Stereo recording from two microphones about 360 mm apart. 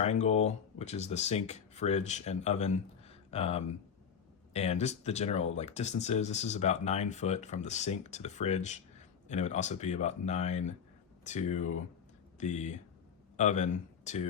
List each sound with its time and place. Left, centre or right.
0.0 s speech: centre